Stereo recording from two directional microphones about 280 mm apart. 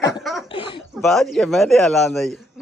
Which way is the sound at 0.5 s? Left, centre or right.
Centre.